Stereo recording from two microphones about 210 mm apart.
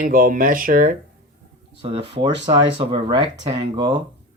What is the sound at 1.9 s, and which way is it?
Speech, 25° right (ahead or behind).